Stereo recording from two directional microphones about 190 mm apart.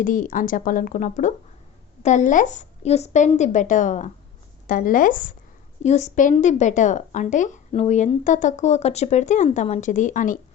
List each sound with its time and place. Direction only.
0.0 s a woman's voice: 45° left (ahead or behind)